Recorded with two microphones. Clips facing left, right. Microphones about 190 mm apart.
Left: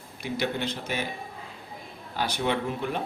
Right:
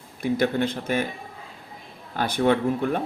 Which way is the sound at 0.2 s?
50° right (ahead or behind).